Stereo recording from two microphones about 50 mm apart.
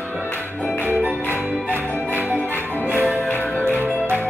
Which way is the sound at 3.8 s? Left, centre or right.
Right.